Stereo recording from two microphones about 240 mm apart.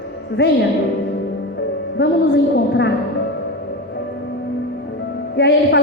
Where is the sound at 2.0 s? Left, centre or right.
Left.